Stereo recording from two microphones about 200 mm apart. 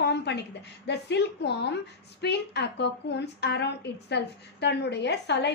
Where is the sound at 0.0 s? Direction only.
55° left (ahead or behind).